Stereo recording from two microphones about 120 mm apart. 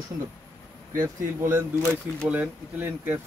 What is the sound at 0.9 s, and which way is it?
Speech, 25° right (ahead or behind).